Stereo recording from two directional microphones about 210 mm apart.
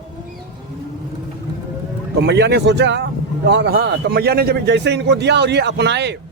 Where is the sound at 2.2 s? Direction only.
55° right (ahead or behind).